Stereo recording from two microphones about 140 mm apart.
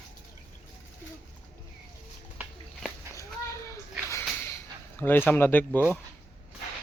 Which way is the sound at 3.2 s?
20° left (ahead or behind).